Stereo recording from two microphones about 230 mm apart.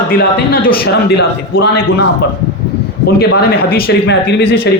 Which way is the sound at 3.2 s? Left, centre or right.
Left.